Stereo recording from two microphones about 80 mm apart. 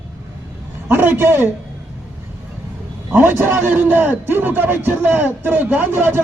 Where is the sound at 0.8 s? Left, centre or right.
Right.